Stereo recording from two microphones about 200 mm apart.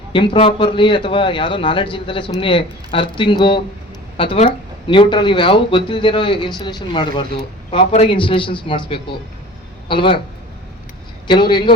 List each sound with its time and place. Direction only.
0.1 s speech: 25° left (ahead or behind)
11.3 s speech: 25° left (ahead or behind)